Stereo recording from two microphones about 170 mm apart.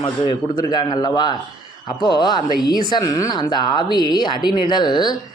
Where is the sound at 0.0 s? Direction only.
25° left (ahead or behind).